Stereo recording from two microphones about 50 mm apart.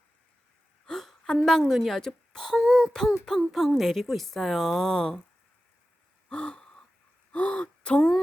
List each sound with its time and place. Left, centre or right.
0.9 s a sound: centre
2.0 s a woman's voice: centre
2.6 s a sound: centre
3.2 s speech: centre
6.2 s gasp: centre
7.3 s speech: left